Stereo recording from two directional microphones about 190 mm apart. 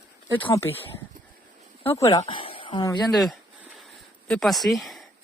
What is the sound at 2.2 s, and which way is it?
Speech, 30° left (ahead or behind).